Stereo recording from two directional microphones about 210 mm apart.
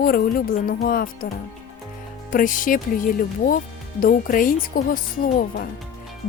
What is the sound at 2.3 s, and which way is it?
Speech, 40° left (ahead or behind).